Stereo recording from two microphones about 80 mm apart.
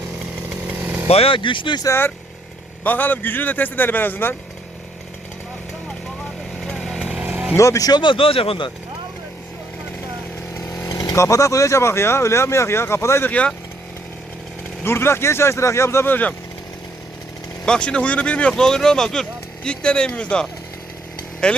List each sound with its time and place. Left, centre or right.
0.5 s chainsaw: centre
1.3 s speech: left
1.9 s speech: left
6.6 s chainsaw: centre
7.0 s chainsaw: centre
7.3 s vehicle: right
7.5 s speech: left
8.0 s speech: left
10.8 s speech: left
14.8 s speech: left
17.7 s speech: centre